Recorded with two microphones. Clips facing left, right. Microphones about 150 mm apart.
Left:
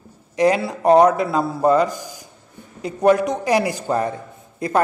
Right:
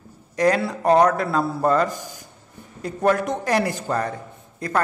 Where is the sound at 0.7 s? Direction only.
20° left (ahead or behind).